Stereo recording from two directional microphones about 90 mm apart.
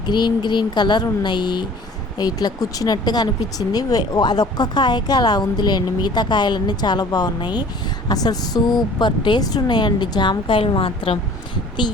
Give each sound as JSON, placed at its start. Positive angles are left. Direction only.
{"t": 0.1, "sound": "speech", "side_deg": 55}